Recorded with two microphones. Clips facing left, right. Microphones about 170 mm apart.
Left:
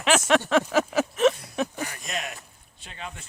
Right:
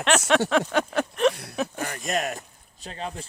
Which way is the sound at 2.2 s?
45° right (ahead or behind).